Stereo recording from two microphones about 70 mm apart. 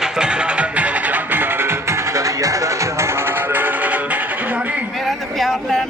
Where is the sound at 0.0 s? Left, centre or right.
Centre.